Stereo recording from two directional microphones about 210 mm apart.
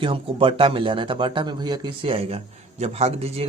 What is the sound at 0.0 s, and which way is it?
A man's voice, 25° right (ahead or behind).